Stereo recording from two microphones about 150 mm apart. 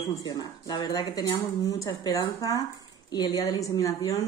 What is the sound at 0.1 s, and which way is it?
Speech, 25° left (ahead or behind).